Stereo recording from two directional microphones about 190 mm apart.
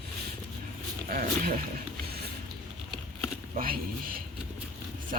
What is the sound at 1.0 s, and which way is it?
Speech, 45° right (ahead or behind).